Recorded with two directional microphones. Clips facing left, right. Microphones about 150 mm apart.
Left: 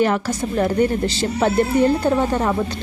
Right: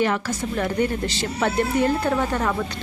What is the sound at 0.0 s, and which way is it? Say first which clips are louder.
A woman's voice: left 4 dB; 35° left (ahead or behind).